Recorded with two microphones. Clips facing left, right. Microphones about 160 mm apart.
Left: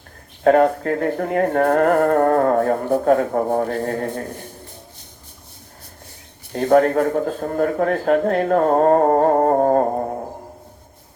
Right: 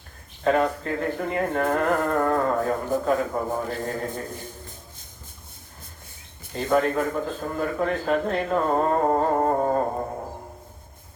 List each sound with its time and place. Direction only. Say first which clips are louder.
0.4 s speech: left 7 dB; 55° left (ahead or behind)
6.5 s a man's voice: left 7 dB; 50° left (ahead or behind)